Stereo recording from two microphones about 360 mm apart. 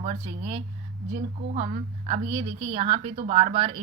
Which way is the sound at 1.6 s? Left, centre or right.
Centre.